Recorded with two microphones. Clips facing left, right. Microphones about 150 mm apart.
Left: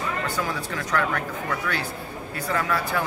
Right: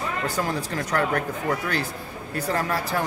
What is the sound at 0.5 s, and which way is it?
A man's voice, 40° right (ahead or behind).